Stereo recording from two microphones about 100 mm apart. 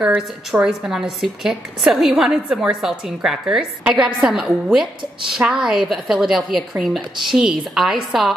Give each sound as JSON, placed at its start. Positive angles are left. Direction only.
{"t": 0.5, "sound": "a woman's voice", "side_deg": -5}